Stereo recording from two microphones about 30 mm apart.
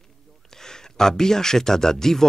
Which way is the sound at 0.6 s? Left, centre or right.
Centre.